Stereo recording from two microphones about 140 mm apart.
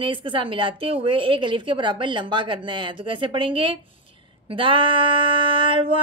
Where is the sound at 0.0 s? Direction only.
40° right (ahead or behind).